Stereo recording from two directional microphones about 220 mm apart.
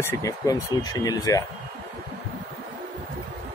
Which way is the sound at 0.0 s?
15° left (ahead or behind).